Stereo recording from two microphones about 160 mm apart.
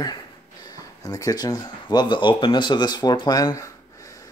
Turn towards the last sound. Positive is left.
turn(degrees=20)  # may be behind; listen again after turning